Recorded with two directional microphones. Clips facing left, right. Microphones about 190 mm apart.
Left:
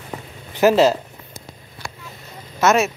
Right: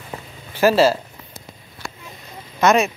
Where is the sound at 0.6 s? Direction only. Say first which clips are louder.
Left 1 dB; 20° left (ahead or behind).